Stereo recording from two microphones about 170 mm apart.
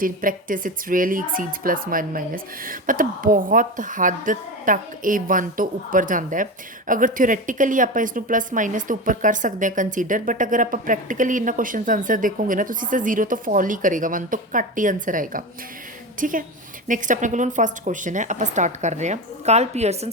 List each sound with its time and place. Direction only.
0.0 s speech: 55° right (ahead or behind)